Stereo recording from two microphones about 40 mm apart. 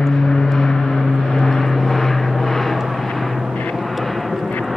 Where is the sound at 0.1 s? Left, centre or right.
Centre.